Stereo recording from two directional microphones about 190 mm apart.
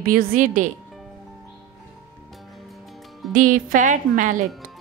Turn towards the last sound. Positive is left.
turn(degrees=-45)  # may be behind; listen again after turning